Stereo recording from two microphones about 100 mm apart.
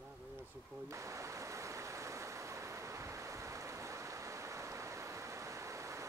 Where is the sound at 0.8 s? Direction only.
30° right (ahead or behind).